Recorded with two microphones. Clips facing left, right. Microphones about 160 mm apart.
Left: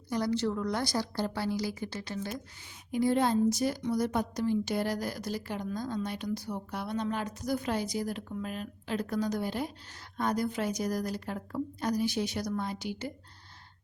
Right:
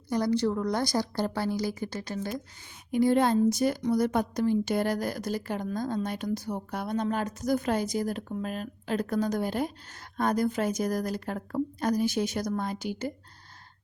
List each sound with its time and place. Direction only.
0.1 s a woman's voice: 45° right (ahead or behind)
2.9 s a woman's voice: 55° right (ahead or behind)